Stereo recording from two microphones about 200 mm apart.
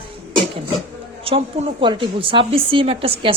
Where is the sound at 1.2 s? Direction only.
25° right (ahead or behind).